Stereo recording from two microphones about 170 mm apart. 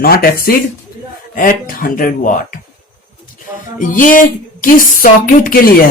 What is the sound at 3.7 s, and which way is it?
Speech, 50° left (ahead or behind).